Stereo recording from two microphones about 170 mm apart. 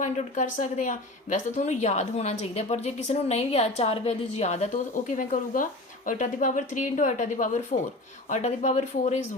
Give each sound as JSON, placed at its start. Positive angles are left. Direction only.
{"t": 0.0, "sound": "a woman's voice", "side_deg": 50}